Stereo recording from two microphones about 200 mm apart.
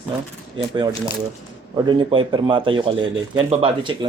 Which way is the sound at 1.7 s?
20° right (ahead or behind).